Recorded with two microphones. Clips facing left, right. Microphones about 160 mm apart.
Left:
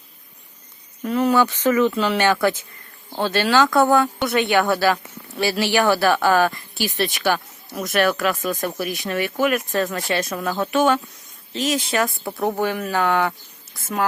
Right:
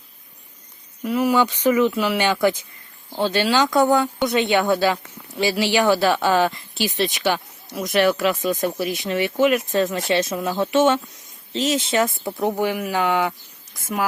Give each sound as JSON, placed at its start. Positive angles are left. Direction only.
{"t": 1.0, "sound": "speech", "side_deg": -15}